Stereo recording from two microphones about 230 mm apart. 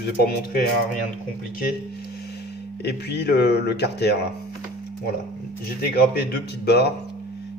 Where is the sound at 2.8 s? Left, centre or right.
Left.